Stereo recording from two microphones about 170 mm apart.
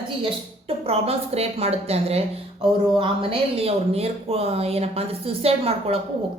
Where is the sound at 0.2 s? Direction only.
35° right (ahead or behind).